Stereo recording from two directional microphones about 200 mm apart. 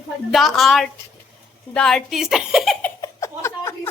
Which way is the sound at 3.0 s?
15° left (ahead or behind).